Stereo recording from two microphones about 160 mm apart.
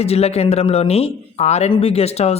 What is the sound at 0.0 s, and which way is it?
Speech, 40° left (ahead or behind).